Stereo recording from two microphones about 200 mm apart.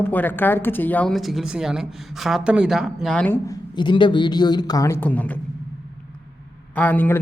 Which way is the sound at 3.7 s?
25° left (ahead or behind).